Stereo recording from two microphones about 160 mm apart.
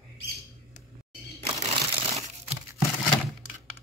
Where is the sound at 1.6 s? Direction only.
45° right (ahead or behind).